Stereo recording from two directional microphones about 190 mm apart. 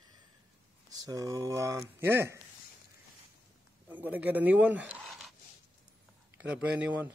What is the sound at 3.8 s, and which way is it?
Speech, 10° right (ahead or behind).